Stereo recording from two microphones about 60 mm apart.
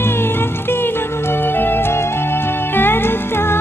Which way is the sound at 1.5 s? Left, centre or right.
Left.